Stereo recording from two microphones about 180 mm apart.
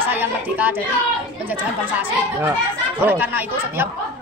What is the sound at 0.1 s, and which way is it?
Speech, 10° right (ahead or behind).